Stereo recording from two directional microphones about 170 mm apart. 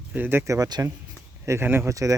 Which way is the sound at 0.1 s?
10° right (ahead or behind).